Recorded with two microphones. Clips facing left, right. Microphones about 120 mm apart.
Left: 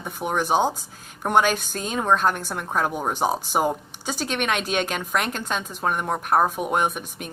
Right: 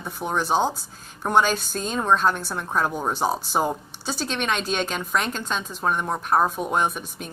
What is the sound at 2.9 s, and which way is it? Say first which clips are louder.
Speech: left 1 dB; 15° left (ahead or behind).